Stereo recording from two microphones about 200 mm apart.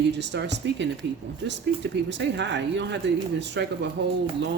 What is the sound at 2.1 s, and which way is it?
Speech, 60° right (ahead or behind).